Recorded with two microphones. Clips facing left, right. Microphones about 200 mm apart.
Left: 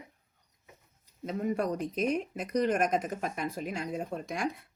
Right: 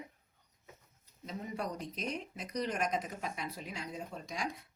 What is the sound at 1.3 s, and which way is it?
Speech, 55° left (ahead or behind).